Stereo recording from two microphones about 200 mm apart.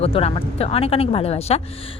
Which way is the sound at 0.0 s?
30° left (ahead or behind).